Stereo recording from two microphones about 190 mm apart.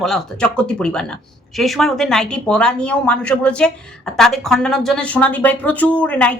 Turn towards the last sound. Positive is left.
turn(degrees=5)  # may be behind; listen again after turning